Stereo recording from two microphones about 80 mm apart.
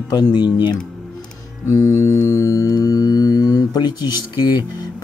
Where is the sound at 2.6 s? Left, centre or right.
Left.